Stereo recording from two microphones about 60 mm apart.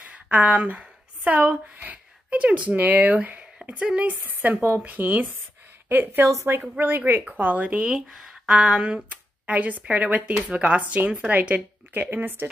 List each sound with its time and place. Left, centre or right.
0.0 s a woman's voice: right
6.2 s a woman's voice: right
6.8 s a woman's voice: right
7.9 s a woman's voice: centre; by 12.4 s right